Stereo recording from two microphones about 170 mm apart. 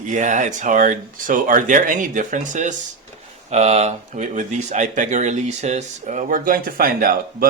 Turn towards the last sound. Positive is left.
turn(degrees=-60)  # may be behind; listen again after turning